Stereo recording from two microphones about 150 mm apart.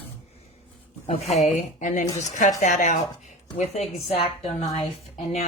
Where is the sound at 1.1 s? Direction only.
45° left (ahead or behind).